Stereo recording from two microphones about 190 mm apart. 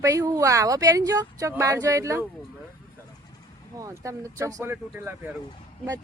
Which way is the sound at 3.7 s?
15° right (ahead or behind).